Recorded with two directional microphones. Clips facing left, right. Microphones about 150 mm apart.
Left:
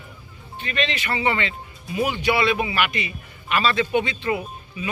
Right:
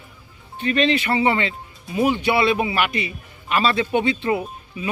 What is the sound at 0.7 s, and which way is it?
Speech, 30° right (ahead or behind).